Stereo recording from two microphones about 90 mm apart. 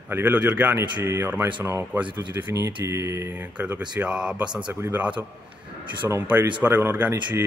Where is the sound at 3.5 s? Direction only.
15° right (ahead or behind).